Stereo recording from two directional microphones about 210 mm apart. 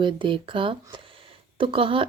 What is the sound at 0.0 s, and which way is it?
Speech, 25° right (ahead or behind).